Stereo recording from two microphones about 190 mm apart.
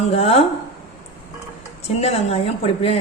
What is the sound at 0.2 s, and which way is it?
Speech, 30° left (ahead or behind).